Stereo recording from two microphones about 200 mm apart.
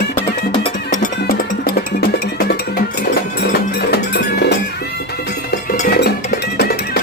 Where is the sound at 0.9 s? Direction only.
45° left (ahead or behind).